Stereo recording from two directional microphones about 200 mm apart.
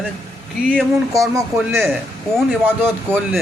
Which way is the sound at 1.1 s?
15° right (ahead or behind).